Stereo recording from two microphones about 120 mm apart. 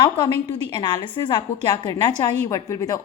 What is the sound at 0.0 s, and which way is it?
A woman's voice, 35° left (ahead or behind).